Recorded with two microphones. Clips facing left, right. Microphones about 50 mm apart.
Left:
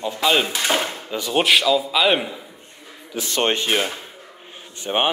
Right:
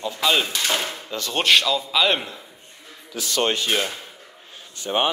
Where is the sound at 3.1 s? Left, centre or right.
Left.